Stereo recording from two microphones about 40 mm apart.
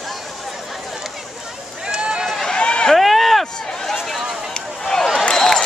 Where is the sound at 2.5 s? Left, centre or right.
Left.